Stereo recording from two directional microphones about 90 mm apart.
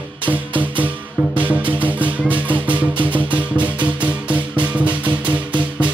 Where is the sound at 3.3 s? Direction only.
60° right (ahead or behind).